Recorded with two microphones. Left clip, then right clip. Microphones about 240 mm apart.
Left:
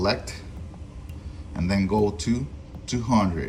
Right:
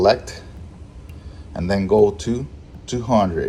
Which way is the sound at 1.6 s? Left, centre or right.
Centre.